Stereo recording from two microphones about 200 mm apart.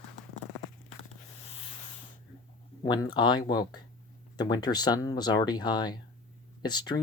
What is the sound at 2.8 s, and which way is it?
Speech, 20° left (ahead or behind).